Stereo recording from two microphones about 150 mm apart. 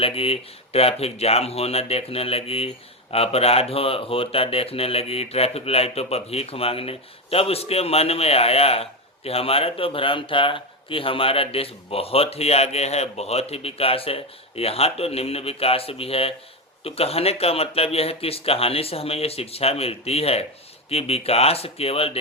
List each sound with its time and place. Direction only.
0.0 s speech: 40° left (ahead or behind)